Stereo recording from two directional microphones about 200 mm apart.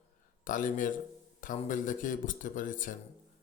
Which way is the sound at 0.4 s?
40° left (ahead or behind).